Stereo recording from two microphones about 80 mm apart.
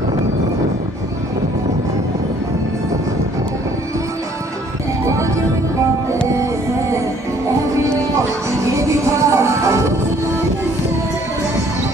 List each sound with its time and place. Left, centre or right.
5.0 s music: right
8.7 s music: right